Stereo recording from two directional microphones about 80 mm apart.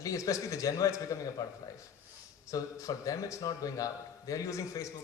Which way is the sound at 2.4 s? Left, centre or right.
Left.